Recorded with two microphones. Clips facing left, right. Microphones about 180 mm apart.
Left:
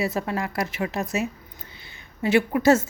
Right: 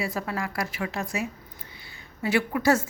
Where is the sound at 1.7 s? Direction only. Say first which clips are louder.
Left 4 dB; 20° left (ahead or behind).